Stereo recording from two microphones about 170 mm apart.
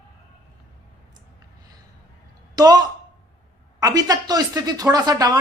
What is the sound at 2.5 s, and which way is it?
A man's voice, 25° right (ahead or behind).